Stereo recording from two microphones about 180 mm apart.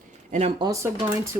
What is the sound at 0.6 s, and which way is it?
Speech, 15° right (ahead or behind).